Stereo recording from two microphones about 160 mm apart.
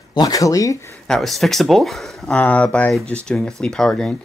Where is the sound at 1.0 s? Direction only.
Centre (ahead or behind).